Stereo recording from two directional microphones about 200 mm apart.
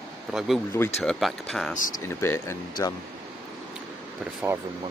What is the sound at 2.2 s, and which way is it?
Speech, 15° left (ahead or behind).